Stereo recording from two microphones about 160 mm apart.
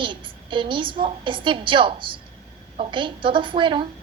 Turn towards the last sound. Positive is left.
turn(degrees=-30)  # may be behind; listen again after turning